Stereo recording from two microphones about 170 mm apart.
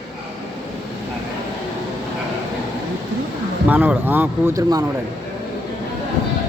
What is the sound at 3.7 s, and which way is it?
Speech, 10° right (ahead or behind).